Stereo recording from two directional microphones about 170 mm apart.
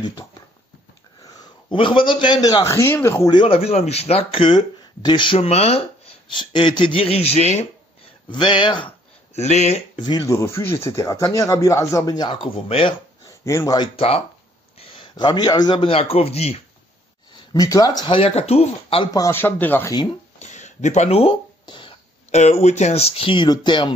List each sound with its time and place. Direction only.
1.2 s a man's voice: 30° left (ahead or behind)
3.3 s speech: 35° left (ahead or behind)
8.3 s speech: 25° left (ahead or behind)
9.9 s speech: 25° left (ahead or behind)
13.4 s speech: 15° left (ahead or behind)
13.9 s a man's voice: 35° left (ahead or behind)
17.5 s speech: 20° left (ahead or behind)
19.1 s speech: 15° left (ahead or behind)
19.9 s speech: 25° left (ahead or behind)
20.3 s a sound: 45° left (ahead or behind)
22.3 s speech: 40° left (ahead or behind)